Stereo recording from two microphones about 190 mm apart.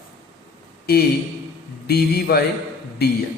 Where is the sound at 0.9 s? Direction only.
55° left (ahead or behind).